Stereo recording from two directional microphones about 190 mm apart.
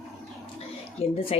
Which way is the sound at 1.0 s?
30° left (ahead or behind).